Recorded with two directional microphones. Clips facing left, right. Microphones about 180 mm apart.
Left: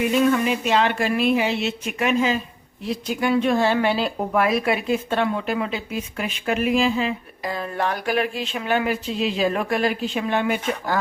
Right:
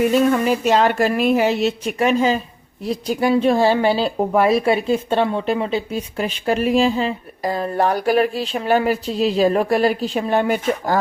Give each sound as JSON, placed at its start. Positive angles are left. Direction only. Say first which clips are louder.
{"t": 0.0, "sound": "a woman's voice", "louder": "right 3 dB", "side_deg": -40}